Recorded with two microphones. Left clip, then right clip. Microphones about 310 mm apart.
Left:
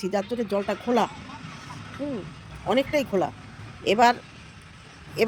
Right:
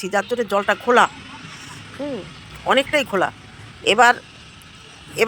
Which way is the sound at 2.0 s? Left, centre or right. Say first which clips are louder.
Right 5 dB; centre.